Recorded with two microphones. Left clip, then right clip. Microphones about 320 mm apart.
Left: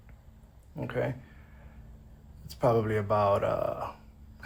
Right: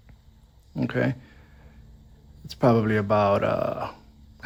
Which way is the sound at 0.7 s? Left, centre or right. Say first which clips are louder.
Right 6 dB; right.